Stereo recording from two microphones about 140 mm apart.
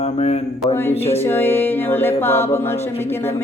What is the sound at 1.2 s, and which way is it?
Music, 15° left (ahead or behind).